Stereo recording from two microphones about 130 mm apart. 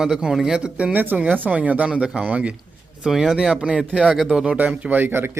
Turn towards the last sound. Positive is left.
turn(degrees=-15)  # may be behind; listen again after turning